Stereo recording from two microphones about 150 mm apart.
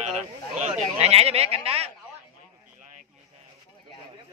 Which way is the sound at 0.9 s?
45° right (ahead or behind).